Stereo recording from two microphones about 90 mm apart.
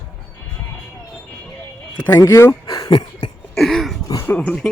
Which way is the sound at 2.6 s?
50° left (ahead or behind).